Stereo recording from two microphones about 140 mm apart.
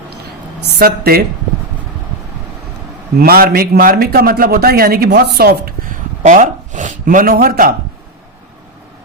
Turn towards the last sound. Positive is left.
turn(degrees=-90)